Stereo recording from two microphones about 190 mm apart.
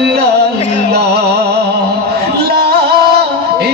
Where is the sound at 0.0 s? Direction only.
60° right (ahead or behind).